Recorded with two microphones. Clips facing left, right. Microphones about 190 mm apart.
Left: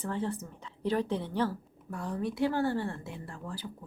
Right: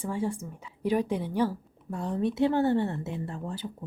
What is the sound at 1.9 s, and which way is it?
A woman's voice, 25° right (ahead or behind).